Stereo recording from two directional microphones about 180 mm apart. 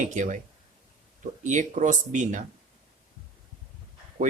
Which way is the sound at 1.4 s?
45° right (ahead or behind).